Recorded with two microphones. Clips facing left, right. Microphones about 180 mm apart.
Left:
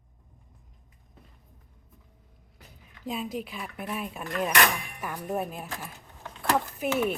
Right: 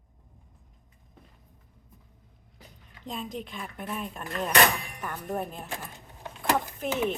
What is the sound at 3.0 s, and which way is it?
Speech, 5° left (ahead or behind).